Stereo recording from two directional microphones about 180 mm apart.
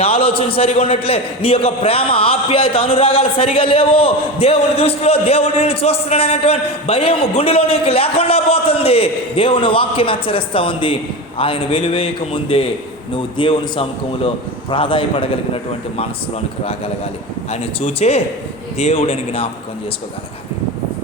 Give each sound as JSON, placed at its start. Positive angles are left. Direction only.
{"t": 0.0, "sound": "a man's voice", "side_deg": 30}
{"t": 17.5, "sound": "a man's voice", "side_deg": 35}